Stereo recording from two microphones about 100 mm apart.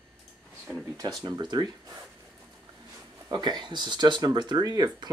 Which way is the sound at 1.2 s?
45° right (ahead or behind).